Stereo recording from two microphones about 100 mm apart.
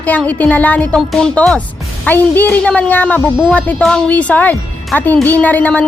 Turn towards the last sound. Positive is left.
turn(degrees=15)  # may be behind; listen again after turning